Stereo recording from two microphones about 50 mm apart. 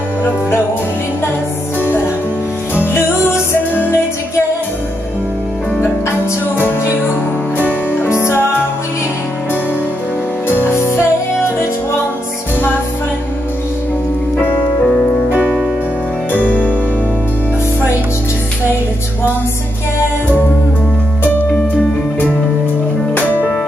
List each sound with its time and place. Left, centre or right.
2.7 s music: left
6.5 s music: left
8.2 s music: left
10.5 s music: left
16.3 s music: left